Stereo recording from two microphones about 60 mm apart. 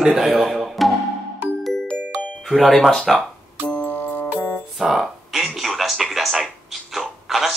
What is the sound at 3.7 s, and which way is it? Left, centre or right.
Music, left.